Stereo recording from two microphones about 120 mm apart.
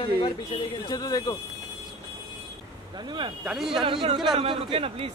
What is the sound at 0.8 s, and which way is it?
Speech, 35° left (ahead or behind).